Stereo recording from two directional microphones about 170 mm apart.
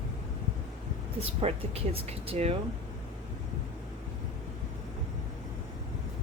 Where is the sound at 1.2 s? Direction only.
35° right (ahead or behind).